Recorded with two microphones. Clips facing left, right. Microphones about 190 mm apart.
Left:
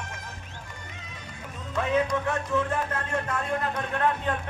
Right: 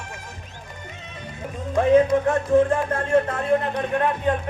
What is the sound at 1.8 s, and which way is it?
Speech, 35° right (ahead or behind).